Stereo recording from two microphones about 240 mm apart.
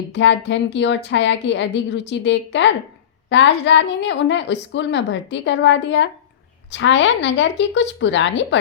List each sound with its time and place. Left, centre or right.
0.1 s a woman's voice: left